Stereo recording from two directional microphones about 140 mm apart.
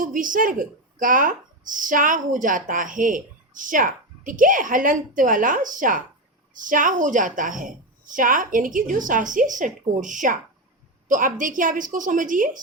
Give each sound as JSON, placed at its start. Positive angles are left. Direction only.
{"t": 0.0, "sound": "speech", "side_deg": -75}